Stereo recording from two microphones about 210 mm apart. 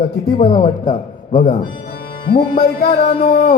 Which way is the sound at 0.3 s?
40° left (ahead or behind).